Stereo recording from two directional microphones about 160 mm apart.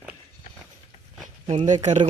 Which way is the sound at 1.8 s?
45° right (ahead or behind).